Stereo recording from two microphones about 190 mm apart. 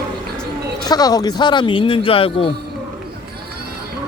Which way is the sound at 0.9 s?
20° left (ahead or behind).